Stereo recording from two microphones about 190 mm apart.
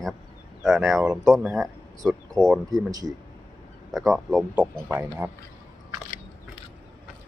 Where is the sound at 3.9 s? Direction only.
Centre (ahead or behind).